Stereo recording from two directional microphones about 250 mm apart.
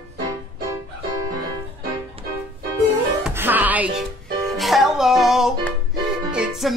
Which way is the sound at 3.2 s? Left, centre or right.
Centre.